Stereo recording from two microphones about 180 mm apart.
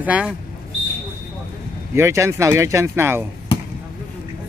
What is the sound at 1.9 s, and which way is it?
Speech, 15° right (ahead or behind).